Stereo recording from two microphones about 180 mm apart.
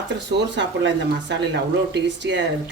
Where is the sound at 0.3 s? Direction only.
75° right (ahead or behind).